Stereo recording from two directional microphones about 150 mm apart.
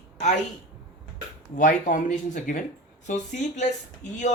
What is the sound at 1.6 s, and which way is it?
Speech, 60° left (ahead or behind).